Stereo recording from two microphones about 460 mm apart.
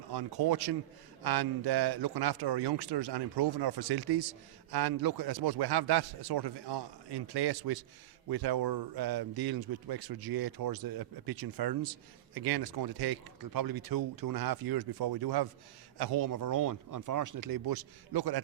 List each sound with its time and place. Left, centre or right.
0.1 s a man's voice: right